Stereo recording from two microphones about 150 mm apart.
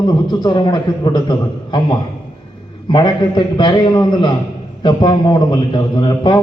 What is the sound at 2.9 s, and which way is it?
A man's voice, 30° left (ahead or behind).